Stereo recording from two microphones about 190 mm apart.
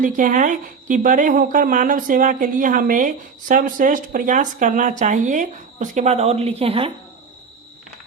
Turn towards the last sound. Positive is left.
turn(degrees=-30)  # may be behind; listen again after turning